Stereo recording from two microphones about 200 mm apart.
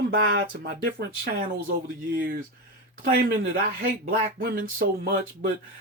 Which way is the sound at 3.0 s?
50° right (ahead or behind).